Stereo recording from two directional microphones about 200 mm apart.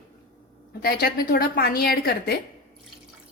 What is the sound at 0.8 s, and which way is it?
A woman's voice, 50° left (ahead or behind).